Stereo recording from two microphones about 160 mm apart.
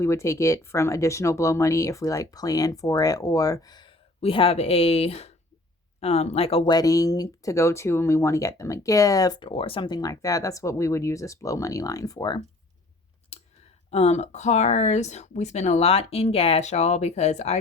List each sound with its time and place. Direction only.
0.0 s speech: 15° left (ahead or behind); by 6.7 s 35° left (ahead or behind)
6.7 s speech: 20° left (ahead or behind)
13.3 s clicking: 45° left (ahead or behind)
13.9 s speech: 40° left (ahead or behind)